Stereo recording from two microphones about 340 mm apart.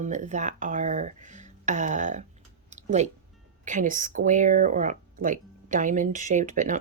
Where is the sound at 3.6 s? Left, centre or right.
Right.